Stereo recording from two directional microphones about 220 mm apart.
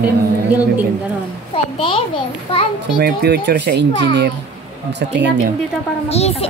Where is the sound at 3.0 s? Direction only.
45° right (ahead or behind).